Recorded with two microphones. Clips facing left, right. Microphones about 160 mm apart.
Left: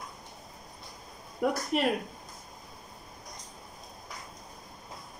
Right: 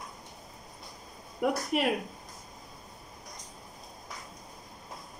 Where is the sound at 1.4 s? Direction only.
5° right (ahead or behind).